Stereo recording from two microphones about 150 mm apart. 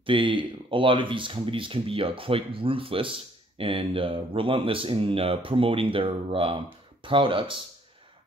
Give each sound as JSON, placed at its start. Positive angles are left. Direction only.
{"t": 0.0, "sound": "speech", "side_deg": -35}